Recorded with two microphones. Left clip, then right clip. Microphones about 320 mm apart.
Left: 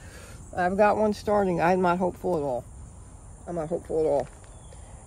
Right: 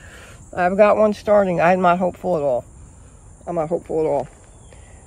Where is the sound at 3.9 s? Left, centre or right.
Right.